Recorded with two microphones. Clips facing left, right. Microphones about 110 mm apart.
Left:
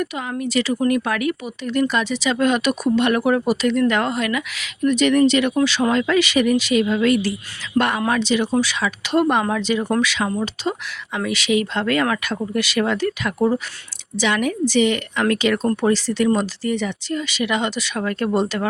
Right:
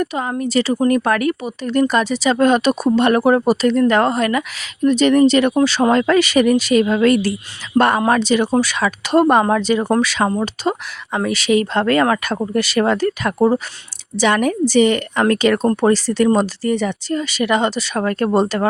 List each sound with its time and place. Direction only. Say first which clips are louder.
0.0 s speech: right 4 dB; 40° right (ahead or behind)